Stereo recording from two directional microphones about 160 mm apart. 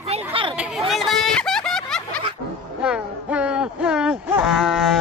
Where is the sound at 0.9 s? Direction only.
Centre (ahead or behind).